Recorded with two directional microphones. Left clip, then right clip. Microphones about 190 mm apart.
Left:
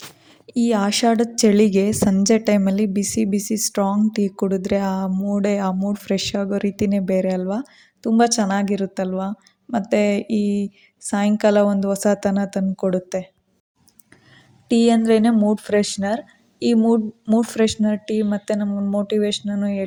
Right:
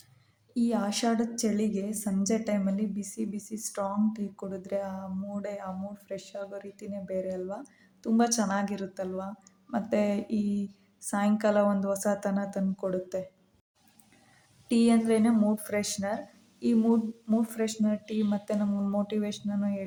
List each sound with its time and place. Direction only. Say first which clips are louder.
0.5 s a woman's voice: left 10 dB; 40° left (ahead or behind)
14.7 s a woman's voice: left 9 dB; 35° left (ahead or behind)